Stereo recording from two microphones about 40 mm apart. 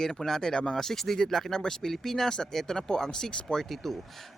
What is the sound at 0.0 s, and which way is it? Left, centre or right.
Speech, centre.